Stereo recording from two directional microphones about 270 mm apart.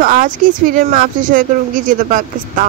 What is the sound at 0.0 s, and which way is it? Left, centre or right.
Speech, right.